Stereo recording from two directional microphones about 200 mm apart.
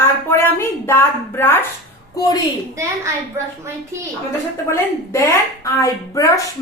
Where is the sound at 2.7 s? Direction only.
15° right (ahead or behind).